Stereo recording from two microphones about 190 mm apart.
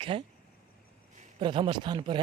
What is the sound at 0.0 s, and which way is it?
Speech, 30° right (ahead or behind).